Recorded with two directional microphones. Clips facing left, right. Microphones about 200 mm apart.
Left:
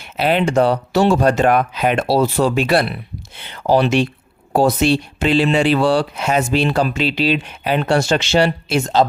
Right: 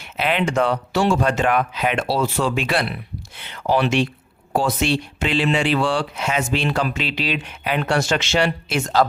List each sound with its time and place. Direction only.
0.0 s speech: 35° left (ahead or behind)